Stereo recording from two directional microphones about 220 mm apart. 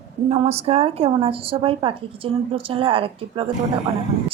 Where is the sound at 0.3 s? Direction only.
30° right (ahead or behind).